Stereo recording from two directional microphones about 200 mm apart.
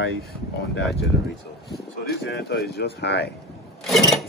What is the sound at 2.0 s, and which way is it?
Speech, 55° left (ahead or behind).